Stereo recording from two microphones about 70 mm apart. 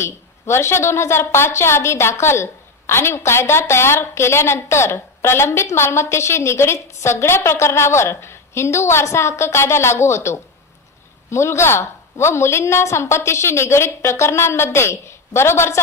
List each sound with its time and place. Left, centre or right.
0.0 s a woman's voice: left